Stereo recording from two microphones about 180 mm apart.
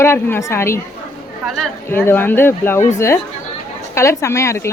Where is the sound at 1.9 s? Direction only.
10° left (ahead or behind).